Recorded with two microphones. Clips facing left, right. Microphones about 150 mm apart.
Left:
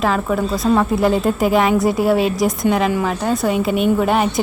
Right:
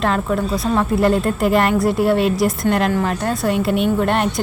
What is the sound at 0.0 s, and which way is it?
A woman's voice, centre (ahead or behind).